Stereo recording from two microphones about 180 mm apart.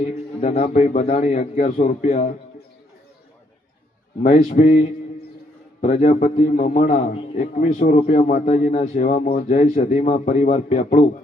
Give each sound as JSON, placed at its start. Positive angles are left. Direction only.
{"t": 0.0, "sound": "a man's voice", "side_deg": 40}
{"t": 4.2, "sound": "a man's voice", "side_deg": 40}